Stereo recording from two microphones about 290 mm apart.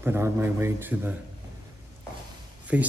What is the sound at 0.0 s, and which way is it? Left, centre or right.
A man's voice, centre.